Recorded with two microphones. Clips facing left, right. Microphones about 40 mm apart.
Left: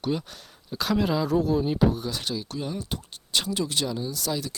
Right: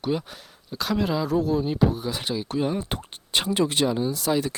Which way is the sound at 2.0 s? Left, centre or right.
Centre.